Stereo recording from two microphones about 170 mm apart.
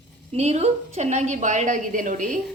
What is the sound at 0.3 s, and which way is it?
A woman's voice, 40° right (ahead or behind).